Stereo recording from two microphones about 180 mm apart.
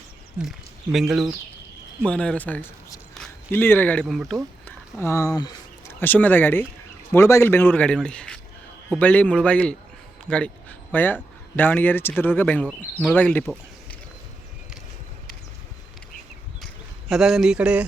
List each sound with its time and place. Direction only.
0.9 s speech: centre (ahead or behind)
4.6 s a sound: 15° left (ahead or behind)
6.0 s a man's voice: 10° left (ahead or behind)
12.6 s speech: centre (ahead or behind)
13.1 s a man's voice: 10° left (ahead or behind)
17.1 s speech: 5° right (ahead or behind)